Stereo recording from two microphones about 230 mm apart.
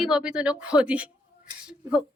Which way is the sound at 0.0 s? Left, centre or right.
Centre.